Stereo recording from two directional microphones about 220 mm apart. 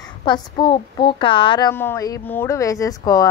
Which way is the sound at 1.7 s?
10° left (ahead or behind).